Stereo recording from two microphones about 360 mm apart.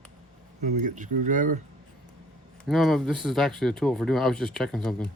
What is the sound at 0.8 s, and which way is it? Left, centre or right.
Speech, right.